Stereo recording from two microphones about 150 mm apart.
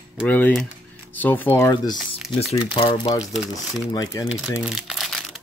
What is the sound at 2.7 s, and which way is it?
Speech, 35° left (ahead or behind).